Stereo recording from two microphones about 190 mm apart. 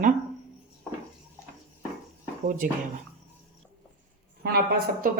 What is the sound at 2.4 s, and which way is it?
Speech, 45° right (ahead or behind).